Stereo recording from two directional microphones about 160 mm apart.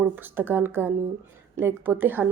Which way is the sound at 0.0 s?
15° right (ahead or behind).